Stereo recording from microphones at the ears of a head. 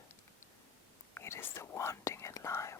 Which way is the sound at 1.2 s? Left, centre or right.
Left.